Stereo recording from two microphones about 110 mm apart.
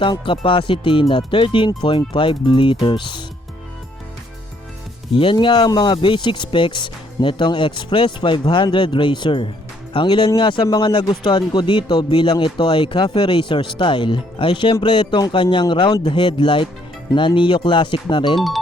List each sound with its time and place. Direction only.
0.0 s speech: 50° left (ahead or behind)
5.1 s speech: 50° left (ahead or behind)
18.3 s speech: centre (ahead or behind)